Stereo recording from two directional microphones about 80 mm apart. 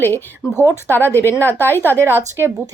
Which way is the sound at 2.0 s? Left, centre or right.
Right.